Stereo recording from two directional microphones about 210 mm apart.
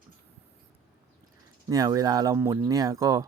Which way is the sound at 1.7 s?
15° right (ahead or behind).